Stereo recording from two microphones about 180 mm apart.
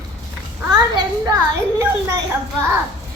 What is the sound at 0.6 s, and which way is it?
Speech, 20° right (ahead or behind).